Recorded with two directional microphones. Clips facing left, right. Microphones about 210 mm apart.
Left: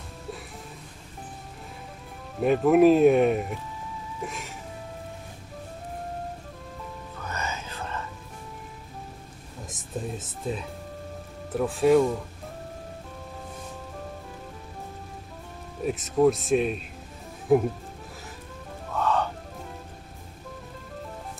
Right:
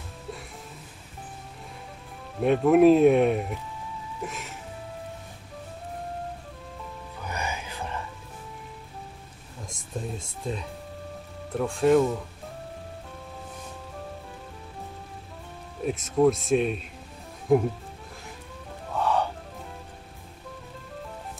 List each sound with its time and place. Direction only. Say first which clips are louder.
2.4 s speech: even; centre (ahead or behind)
4.2 s music: even; centre (ahead or behind)
7.2 s music: right 1 dB; 15° right (ahead or behind)
9.7 s speech: left 1 dB; 5° left (ahead or behind)
15.8 s speech: even; centre (ahead or behind)
18.9 s music: even; 10° right (ahead or behind)